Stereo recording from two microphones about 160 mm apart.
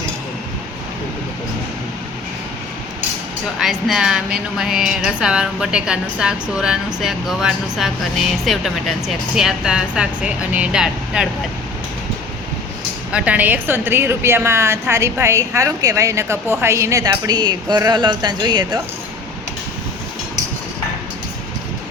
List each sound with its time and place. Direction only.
3.6 s a woman's voice: centre (ahead or behind)
13.1 s a woman's voice: 10° right (ahead or behind); by 18.8 s 25° right (ahead or behind)